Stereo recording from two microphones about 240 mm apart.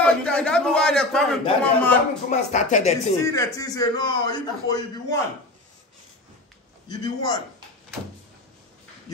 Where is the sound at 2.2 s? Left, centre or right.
Left.